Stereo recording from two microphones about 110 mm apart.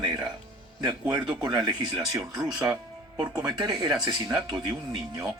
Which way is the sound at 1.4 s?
40° right (ahead or behind).